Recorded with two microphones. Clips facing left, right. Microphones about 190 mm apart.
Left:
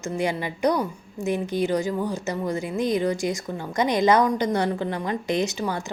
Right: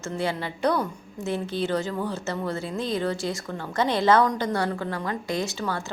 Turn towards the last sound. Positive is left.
turn(degrees=15)  # may be behind; listen again after turning